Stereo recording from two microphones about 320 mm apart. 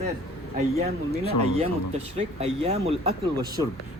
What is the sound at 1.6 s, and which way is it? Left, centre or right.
Speech, centre.